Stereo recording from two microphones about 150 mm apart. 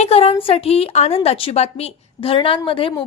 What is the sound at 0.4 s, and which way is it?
A woman's voice, 40° left (ahead or behind).